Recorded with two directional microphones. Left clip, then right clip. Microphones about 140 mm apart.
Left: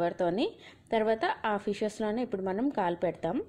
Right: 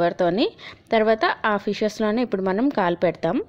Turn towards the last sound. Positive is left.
turn(degrees=-25)  # may be behind; listen again after turning